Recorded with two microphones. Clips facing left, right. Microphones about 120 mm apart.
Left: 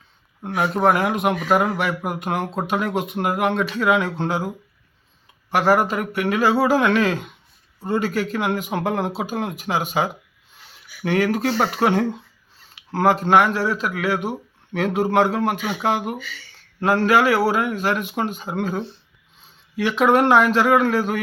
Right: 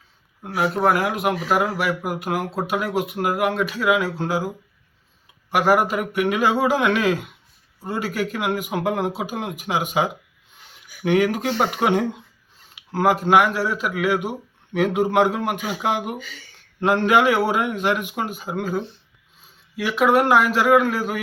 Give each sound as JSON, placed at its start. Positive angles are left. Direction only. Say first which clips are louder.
{"t": 0.4, "sound": "speech", "louder": "left 1 dB", "side_deg": 0}
{"t": 16.1, "sound": "speech", "louder": "left 1 dB", "side_deg": -40}
{"t": 16.8, "sound": "speech", "louder": "even", "side_deg": -20}